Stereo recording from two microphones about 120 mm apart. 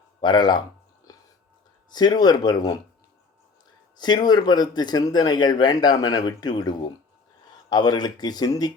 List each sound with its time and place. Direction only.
0.2 s speech: 35° left (ahead or behind)
1.1 s whispering: 30° left (ahead or behind)
1.9 s speech: 35° left (ahead or behind)
3.9 s speech: 35° left (ahead or behind)